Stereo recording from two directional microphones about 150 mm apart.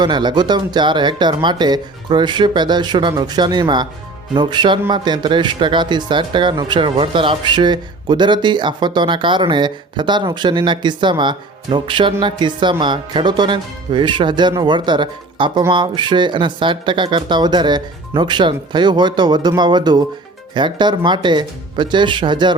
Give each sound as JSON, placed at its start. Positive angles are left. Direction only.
{"t": 0.0, "sound": "speech", "side_deg": -30}